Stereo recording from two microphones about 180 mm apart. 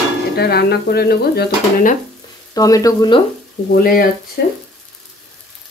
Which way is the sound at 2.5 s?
20° left (ahead or behind).